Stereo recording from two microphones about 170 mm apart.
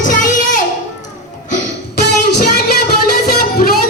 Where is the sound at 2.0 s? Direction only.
80° left.